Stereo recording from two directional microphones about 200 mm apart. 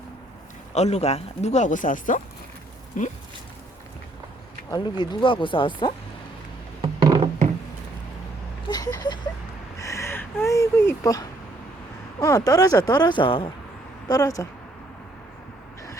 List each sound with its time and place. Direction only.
0.7 s speech: 35° left (ahead or behind)
4.7 s speech: 20° left (ahead or behind)
6.8 s music: 25° right (ahead or behind)
8.6 s a sound: 20° left (ahead or behind)
9.7 s speech: 15° left (ahead or behind)